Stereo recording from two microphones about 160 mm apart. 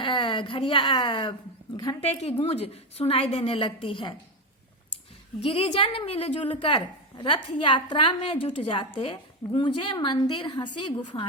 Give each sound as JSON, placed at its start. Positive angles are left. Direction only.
{"t": 0.0, "sound": "speech", "side_deg": 30}
{"t": 2.4, "sound": "a woman's voice", "side_deg": 40}
{"t": 5.4, "sound": "a woman's voice", "side_deg": 35}